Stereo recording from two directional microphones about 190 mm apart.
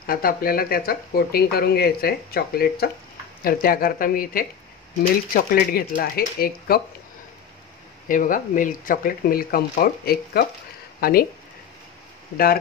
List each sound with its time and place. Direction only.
0.0 s speech: 50° left (ahead or behind)
8.1 s speech: 45° left (ahead or behind)